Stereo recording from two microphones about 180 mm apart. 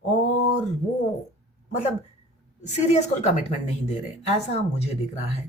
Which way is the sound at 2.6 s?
40° left (ahead or behind).